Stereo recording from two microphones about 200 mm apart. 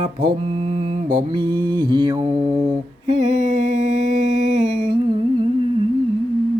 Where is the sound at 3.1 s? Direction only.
35° right (ahead or behind).